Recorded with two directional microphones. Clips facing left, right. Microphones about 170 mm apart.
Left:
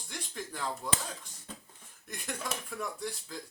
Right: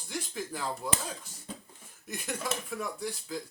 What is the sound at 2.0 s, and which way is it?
Speech, 5° right (ahead or behind).